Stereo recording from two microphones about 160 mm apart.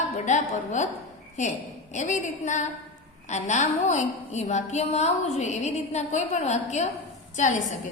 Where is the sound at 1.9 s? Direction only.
50° left (ahead or behind).